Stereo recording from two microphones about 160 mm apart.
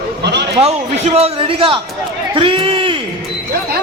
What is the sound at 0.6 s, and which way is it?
A man's voice, 40° right (ahead or behind).